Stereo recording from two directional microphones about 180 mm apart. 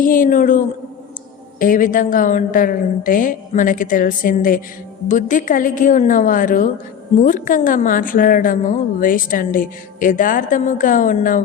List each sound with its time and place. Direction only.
0.0 s a woman's voice: 50° left (ahead or behind)